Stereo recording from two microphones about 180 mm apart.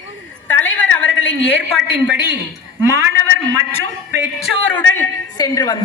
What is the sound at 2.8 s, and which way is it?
Speech, 15° right (ahead or behind).